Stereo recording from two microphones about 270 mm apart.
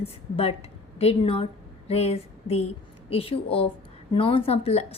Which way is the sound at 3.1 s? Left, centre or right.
Left.